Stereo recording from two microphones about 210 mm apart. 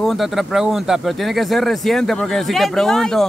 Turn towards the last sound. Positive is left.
turn(degrees=5)  # may be behind; listen again after turning